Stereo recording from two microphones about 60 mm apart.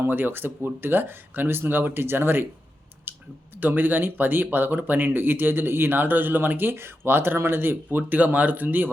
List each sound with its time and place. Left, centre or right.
0.0 s speech: right
3.1 s a sound: right
3.6 s speech: right